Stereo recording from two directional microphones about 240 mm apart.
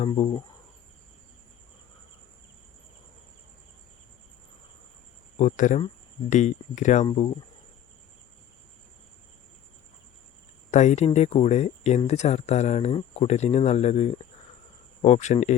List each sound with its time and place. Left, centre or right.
0.0 s speech: left
5.4 s speech: left
10.7 s speech: left